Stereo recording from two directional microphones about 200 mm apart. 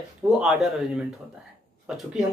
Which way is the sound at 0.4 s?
Centre (ahead or behind).